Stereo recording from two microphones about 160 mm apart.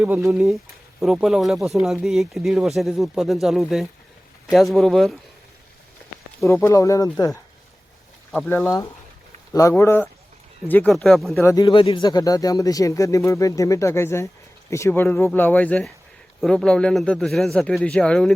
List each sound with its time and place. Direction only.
0.0 s speech: 15° right (ahead or behind)
0.3 s speech: centre (ahead or behind)
6.5 s speech: 20° left (ahead or behind)
9.5 s speech: 20° left (ahead or behind); by 11.4 s centre (ahead or behind)
11.4 s speech: 25° left (ahead or behind); by 18.3 s 5° left (ahead or behind)